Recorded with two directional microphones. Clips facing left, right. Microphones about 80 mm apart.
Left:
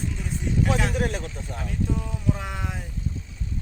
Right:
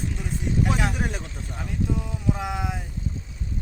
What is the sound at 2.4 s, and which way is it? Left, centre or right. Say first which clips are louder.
Speech: right 4 dB; centre.